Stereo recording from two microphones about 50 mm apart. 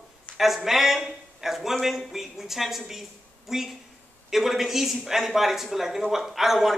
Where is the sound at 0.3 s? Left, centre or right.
Left.